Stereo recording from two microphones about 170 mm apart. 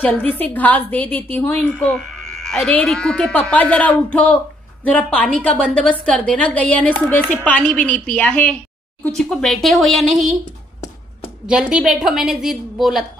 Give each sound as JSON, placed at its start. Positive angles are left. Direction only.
{"t": 0.0, "sound": "a woman's voice", "side_deg": 10}
{"t": 11.4, "sound": "speech", "side_deg": -5}